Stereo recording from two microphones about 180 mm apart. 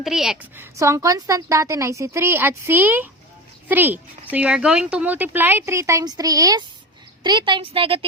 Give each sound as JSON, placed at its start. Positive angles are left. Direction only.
{"t": 0.0, "sound": "a woman's voice", "side_deg": 0}